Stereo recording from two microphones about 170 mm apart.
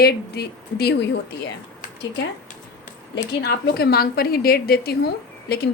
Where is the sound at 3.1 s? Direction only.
70° left (ahead or behind).